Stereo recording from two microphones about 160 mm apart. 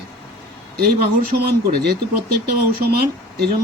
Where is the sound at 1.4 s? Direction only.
70° right (ahead or behind).